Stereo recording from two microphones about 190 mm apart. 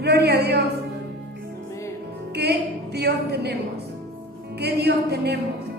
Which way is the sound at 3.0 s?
60° right (ahead or behind).